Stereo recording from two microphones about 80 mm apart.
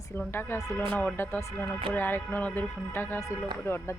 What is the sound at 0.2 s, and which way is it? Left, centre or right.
Speech, left.